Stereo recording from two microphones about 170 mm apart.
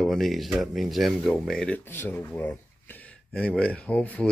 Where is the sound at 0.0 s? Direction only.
Centre (ahead or behind).